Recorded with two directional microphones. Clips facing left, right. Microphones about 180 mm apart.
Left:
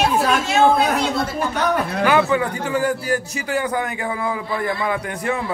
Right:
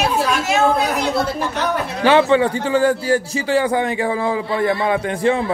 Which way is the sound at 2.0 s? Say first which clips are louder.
Right 5 dB; 25° right (ahead or behind).